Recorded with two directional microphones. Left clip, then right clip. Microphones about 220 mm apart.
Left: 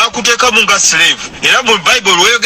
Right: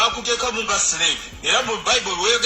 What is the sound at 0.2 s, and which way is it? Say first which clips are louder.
A man's voice: left 13 dB; 35° left (ahead or behind).